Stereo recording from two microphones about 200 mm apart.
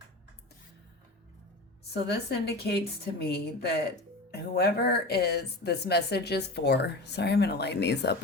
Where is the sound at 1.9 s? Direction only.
55° left (ahead or behind).